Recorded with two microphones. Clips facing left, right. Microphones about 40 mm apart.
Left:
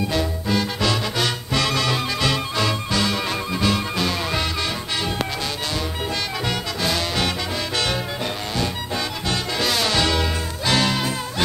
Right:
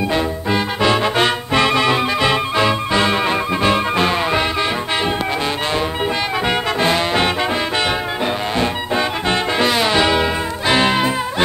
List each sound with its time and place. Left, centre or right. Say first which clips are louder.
0.1 s music: right 4 dB; right
6.4 s music: right 9 dB; right
8.5 s music: right 6 dB; right